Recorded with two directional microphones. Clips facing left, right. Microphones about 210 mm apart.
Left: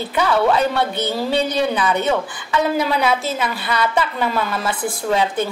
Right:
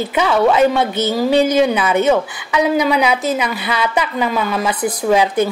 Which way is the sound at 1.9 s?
20° right (ahead or behind).